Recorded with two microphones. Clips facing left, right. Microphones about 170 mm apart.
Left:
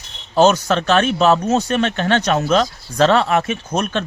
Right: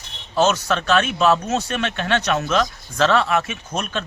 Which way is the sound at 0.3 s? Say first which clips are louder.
Left 5 dB; 35° left (ahead or behind).